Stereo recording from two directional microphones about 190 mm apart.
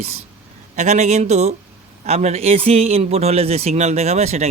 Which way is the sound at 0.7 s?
35° right (ahead or behind).